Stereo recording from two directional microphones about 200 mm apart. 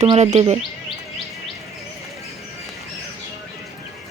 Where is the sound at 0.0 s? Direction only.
30° right (ahead or behind).